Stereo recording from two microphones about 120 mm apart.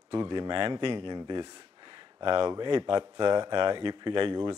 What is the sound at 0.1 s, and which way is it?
Speech, 45° right (ahead or behind).